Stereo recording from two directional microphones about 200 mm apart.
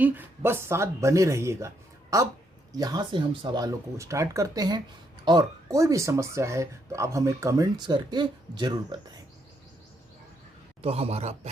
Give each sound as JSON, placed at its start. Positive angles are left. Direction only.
{"t": 0.0, "sound": "speech", "side_deg": -10}
{"t": 10.8, "sound": "a man's voice", "side_deg": -30}